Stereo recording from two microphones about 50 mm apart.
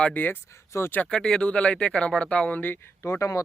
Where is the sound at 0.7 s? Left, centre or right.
Left.